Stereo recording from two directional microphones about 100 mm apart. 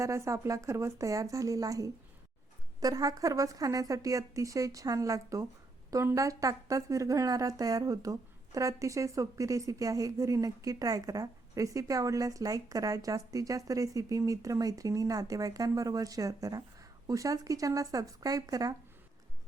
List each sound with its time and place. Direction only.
0.0 s speech: 30° right (ahead or behind)